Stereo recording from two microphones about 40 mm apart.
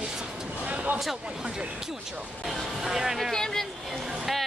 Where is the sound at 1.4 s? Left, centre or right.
Centre.